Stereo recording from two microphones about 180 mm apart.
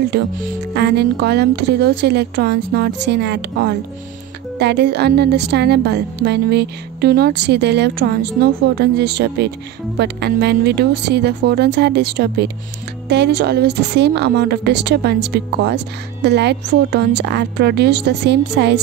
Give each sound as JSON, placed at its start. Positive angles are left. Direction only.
{"t": 0.1, "sound": "a woman's voice", "side_deg": -65}